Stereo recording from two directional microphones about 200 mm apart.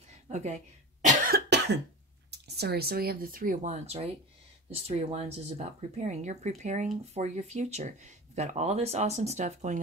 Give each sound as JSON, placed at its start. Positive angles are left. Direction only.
{"t": 0.3, "sound": "speech", "side_deg": -35}
{"t": 1.0, "sound": "cough", "side_deg": -50}
{"t": 2.4, "sound": "speech", "side_deg": -55}